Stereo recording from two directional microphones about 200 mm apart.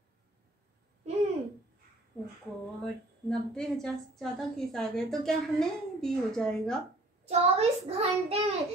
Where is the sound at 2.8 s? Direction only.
5° left (ahead or behind).